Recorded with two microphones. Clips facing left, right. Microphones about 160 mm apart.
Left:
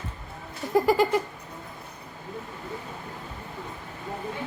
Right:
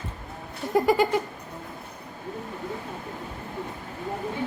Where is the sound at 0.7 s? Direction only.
Centre (ahead or behind).